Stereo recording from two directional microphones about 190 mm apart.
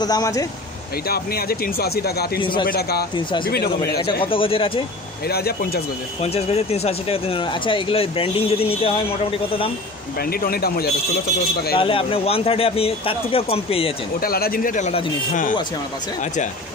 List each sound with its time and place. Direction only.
0.0 s speech: 20° left (ahead or behind)
1.0 s a man's voice: 55° left (ahead or behind)
4.2 s speech: 30° left (ahead or behind)
5.3 s a man's voice: 55° left (ahead or behind)
6.2 s speech: 35° left (ahead or behind)
10.3 s speech: 55° left (ahead or behind)
11.8 s speech: 30° left (ahead or behind)
14.2 s speech: 50° left (ahead or behind)